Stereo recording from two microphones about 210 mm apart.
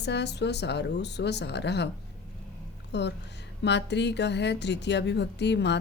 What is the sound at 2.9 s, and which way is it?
Speech, 55° left (ahead or behind).